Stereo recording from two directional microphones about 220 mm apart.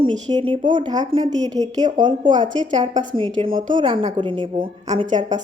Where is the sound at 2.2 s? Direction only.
35° right (ahead or behind).